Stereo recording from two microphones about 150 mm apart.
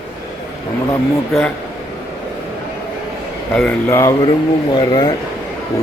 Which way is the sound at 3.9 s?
20° left (ahead or behind).